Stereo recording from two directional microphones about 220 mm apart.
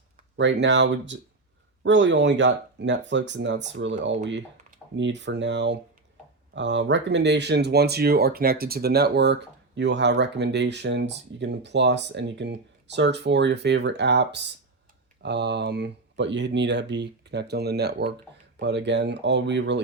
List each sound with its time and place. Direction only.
0.3 s speech: 55° right (ahead or behind)